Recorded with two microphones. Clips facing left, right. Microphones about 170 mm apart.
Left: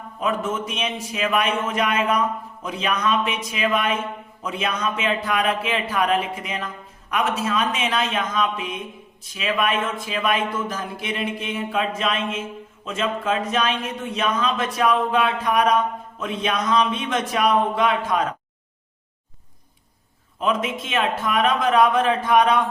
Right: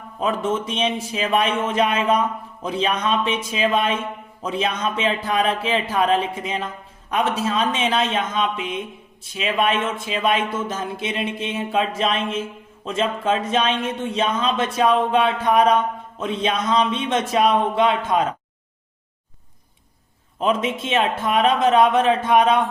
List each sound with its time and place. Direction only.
0.2 s speech: 30° right (ahead or behind)
20.4 s speech: 30° right (ahead or behind)